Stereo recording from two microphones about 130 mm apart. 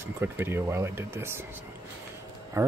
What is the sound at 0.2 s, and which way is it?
Speech, 15° right (ahead or behind).